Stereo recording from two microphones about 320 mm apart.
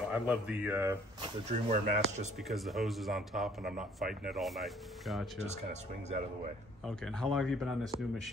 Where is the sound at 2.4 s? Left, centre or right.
Centre.